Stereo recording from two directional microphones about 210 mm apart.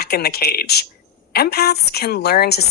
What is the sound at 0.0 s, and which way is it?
Speech, 50° left (ahead or behind).